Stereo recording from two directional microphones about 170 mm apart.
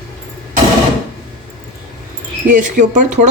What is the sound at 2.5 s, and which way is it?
Speech, 50° right (ahead or behind).